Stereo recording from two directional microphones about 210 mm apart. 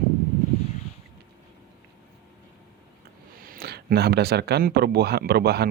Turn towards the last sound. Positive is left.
turn(degrees=-50)  # may be behind; listen again after turning